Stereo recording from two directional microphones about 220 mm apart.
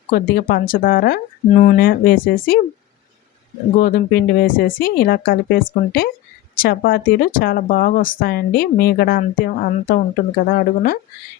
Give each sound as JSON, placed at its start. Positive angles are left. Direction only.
{"t": 0.1, "sound": "speech", "side_deg": 40}
{"t": 3.8, "sound": "speech", "side_deg": 40}